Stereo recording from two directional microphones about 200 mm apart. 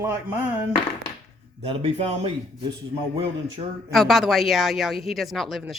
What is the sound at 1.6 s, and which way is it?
Speech, 30° right (ahead or behind).